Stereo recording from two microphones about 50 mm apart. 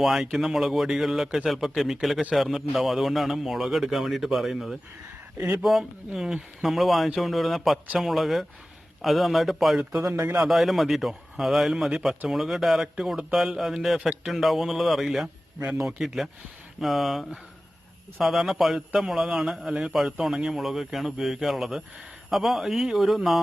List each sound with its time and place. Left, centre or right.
0.0 s a man's voice: centre